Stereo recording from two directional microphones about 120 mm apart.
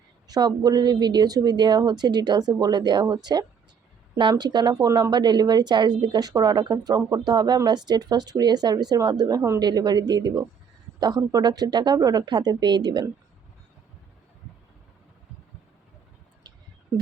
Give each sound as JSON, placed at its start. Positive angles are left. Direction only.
{"t": 0.3, "sound": "speech", "side_deg": -35}
{"t": 4.2, "sound": "speech", "side_deg": -40}